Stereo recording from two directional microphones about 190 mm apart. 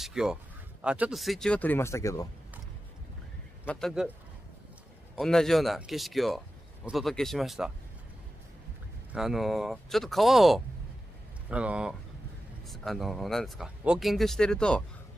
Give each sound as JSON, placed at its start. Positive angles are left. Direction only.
{"t": 0.0, "sound": "speech", "side_deg": -5}
{"t": 3.6, "sound": "speech", "side_deg": 0}
{"t": 5.1, "sound": "speech", "side_deg": 5}
{"t": 9.1, "sound": "speech", "side_deg": 0}